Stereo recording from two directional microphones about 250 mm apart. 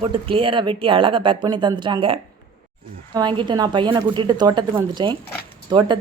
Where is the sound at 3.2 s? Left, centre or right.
Centre.